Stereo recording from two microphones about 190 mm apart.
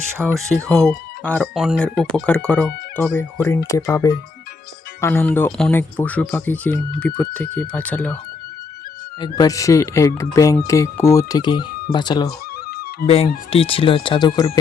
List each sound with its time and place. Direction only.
0.1 s speech: 15° right (ahead or behind)
0.3 s speech: 5° left (ahead or behind)
9.2 s speech: 20° left (ahead or behind)
12.6 s music: 55° left (ahead or behind)
13.5 s speech: 30° left (ahead or behind)